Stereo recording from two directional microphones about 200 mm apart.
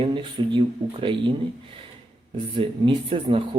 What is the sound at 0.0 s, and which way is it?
Speech, 25° right (ahead or behind).